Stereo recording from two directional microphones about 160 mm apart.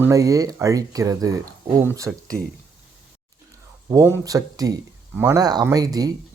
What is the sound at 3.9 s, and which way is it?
Speech, 20° right (ahead or behind).